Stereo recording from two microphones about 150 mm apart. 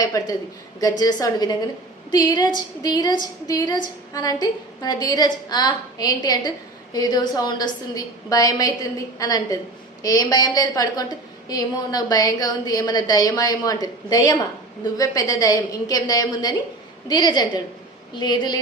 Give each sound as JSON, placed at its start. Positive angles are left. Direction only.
{"t": 0.0, "sound": "a woman's voice", "side_deg": 25}